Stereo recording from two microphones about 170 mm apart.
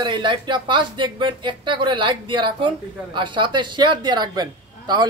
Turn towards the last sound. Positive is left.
turn(degrees=-25)  # may be behind; listen again after turning